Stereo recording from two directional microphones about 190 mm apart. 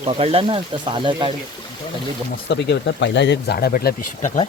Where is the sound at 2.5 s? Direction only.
65° left (ahead or behind).